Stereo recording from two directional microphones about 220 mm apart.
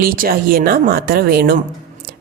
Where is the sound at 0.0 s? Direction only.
40° right (ahead or behind).